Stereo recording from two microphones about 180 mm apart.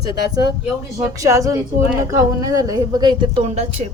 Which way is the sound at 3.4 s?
35° right (ahead or behind).